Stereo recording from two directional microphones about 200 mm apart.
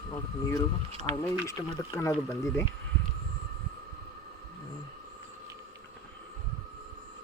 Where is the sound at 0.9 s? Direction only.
35° right (ahead or behind).